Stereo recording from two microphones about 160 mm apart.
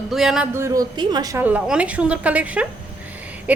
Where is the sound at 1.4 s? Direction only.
10° right (ahead or behind).